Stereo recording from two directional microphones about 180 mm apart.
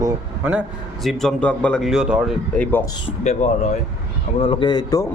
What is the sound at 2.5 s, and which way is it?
Speech, 5° left (ahead or behind).